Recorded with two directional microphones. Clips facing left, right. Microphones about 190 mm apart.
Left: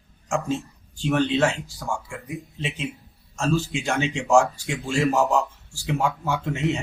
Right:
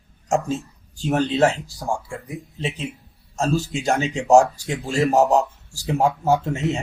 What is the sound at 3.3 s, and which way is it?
A man's voice, 35° right (ahead or behind).